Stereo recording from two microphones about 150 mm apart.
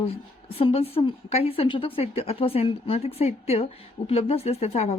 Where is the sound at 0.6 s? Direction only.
40° left (ahead or behind).